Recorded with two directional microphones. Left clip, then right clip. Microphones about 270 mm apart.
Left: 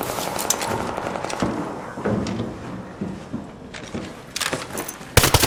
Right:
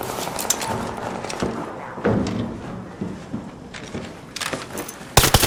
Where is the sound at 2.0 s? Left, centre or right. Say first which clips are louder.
Right 4 dB; right.